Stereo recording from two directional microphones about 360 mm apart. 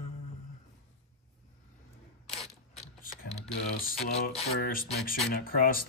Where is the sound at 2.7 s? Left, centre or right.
Centre.